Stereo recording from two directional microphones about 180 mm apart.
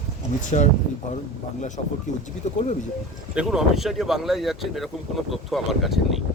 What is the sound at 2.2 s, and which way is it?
Speech, 40° left (ahead or behind).